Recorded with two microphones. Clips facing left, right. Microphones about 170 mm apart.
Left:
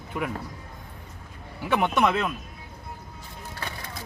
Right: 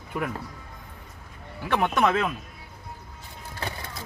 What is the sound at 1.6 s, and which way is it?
Speech, centre (ahead or behind).